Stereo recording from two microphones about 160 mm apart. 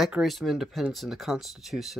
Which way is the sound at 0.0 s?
Centre (ahead or behind).